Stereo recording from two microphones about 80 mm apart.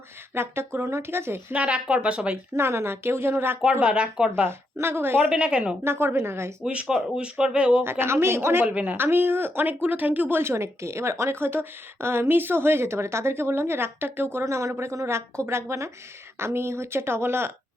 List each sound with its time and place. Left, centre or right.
0.3 s speech: right
1.5 s speech: centre
2.6 s a woman's voice: right
3.6 s speech: centre
4.4 s a woman's voice: right
5.3 s speech: centre
5.8 s speech: right
6.7 s speech: centre
7.9 s speech: right
8.6 s speech: right